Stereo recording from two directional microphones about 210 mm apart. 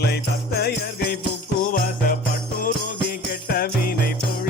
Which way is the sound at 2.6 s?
45° left (ahead or behind).